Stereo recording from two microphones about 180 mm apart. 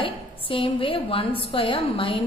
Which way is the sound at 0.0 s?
30° left (ahead or behind).